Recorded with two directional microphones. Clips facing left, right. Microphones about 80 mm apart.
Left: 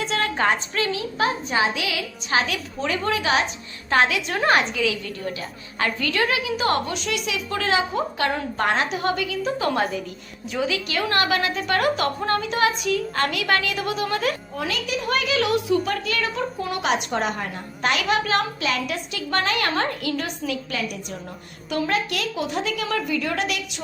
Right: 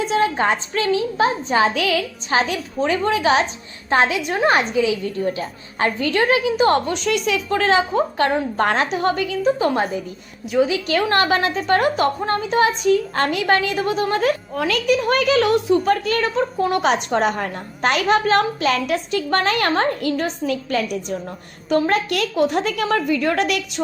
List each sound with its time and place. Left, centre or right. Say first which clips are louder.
0.0 s a woman's voice: right 4 dB; right
1.6 s a woman's voice: right 6 dB; right
7.0 s a woman's voice: right 7 dB; right
10.9 s a woman's voice: right 5 dB; right
14.5 s a woman's voice: right 8 dB; right